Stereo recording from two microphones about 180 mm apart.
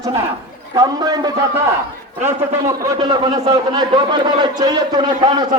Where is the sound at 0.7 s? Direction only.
20° right (ahead or behind).